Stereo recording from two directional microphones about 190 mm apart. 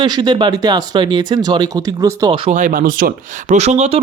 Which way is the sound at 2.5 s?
45° right (ahead or behind).